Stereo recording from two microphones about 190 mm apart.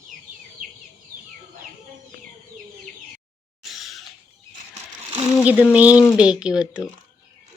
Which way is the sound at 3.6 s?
Centre (ahead or behind).